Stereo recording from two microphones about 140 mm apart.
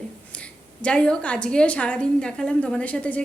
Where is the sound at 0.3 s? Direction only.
10° left (ahead or behind).